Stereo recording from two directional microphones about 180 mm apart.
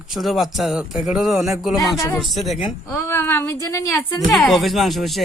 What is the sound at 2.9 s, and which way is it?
A woman's voice, 15° left (ahead or behind).